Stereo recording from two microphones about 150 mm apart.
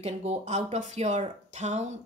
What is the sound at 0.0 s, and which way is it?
Speech, 45° right (ahead or behind).